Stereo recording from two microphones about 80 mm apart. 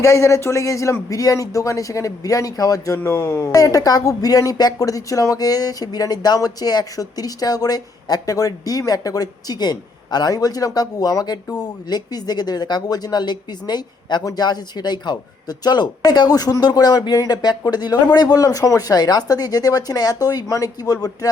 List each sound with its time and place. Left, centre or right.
0.0 s speech: left